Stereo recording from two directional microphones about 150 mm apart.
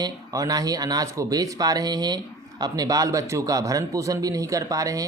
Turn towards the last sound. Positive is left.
turn(degrees=-25)  # may be behind; listen again after turning